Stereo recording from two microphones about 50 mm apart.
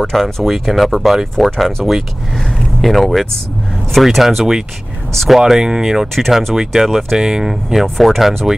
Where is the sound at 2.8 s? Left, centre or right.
Centre.